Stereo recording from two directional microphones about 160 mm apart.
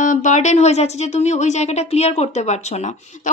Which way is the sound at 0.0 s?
50° left (ahead or behind).